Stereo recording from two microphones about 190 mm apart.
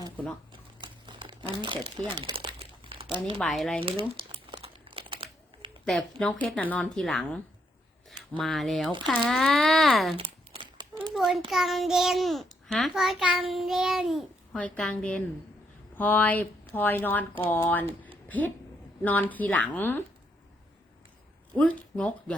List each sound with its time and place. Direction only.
0.8 s crumpling: 25° right (ahead or behind)
3.4 s a child's voice: centre (ahead or behind)
3.8 s speech: 30° right (ahead or behind)
4.5 s crumpling: 30° right (ahead or behind)
5.8 s a child's voice: 5° left (ahead or behind)
10.2 s a sound: 30° right (ahead or behind)
10.9 s a sound: centre (ahead or behind)
11.5 s a child's voice: centre (ahead or behind)
21.5 s speech: 5° left (ahead or behind)